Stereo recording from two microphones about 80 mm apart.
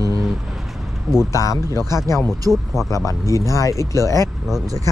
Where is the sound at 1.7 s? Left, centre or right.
Right.